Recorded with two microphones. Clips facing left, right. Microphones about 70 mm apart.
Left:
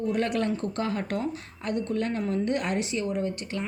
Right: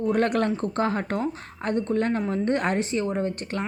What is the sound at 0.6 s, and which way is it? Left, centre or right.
Speech, right.